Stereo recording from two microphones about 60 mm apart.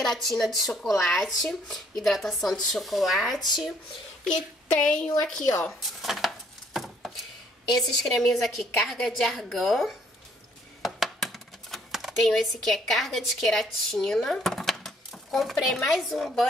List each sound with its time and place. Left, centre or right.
0.0 s speech: centre
4.3 s speech: centre
5.7 s a sound: centre
7.7 s speech: centre
10.8 s a sound: centre
15.3 s speech: centre